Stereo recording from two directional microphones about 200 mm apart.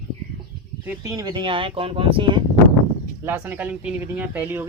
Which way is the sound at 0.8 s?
15° right (ahead or behind).